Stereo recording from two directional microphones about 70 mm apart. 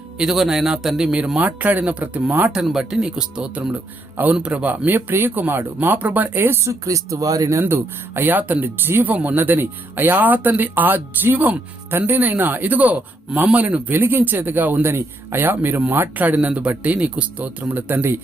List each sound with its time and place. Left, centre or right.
0.2 s a man's voice: centre; by 2.5 s right
2.5 s a man's voice: centre; by 6.7 s right
6.8 s speech: right
7.6 s speech: right